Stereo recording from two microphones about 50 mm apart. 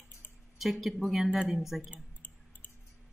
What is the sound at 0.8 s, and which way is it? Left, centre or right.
Speech, centre.